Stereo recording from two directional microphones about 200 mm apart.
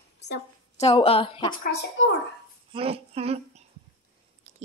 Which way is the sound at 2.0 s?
70° left (ahead or behind).